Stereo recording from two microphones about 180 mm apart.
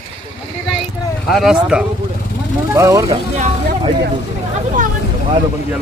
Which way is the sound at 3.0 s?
35° right (ahead or behind).